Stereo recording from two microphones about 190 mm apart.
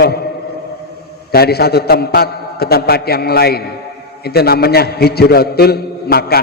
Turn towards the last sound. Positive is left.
turn(degrees=55)  # may be behind; listen again after turning